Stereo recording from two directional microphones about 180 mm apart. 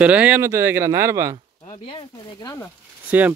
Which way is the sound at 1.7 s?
25° left (ahead or behind).